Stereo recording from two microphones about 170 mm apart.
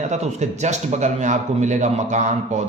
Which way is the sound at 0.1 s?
40° right (ahead or behind).